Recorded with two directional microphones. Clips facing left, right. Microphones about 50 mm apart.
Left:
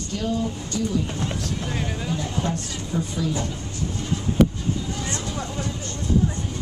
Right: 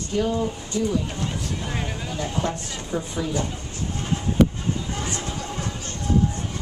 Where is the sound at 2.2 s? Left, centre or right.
Right.